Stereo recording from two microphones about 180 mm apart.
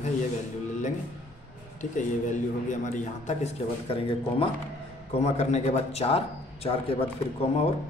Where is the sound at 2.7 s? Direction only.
45° left (ahead or behind).